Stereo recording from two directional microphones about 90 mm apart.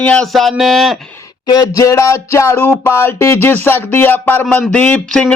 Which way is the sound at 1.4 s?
45° left (ahead or behind).